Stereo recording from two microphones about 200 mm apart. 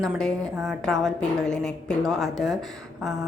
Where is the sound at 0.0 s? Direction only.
Centre (ahead or behind).